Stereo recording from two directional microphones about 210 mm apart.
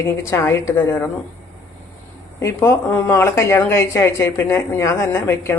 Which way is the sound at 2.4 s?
10° left (ahead or behind).